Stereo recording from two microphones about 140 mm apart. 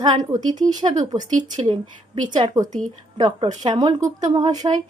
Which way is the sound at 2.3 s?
30° right (ahead or behind).